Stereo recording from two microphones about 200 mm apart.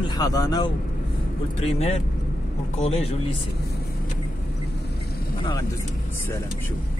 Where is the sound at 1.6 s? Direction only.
35° left (ahead or behind).